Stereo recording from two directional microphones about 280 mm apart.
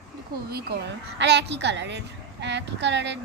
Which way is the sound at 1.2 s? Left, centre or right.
Right.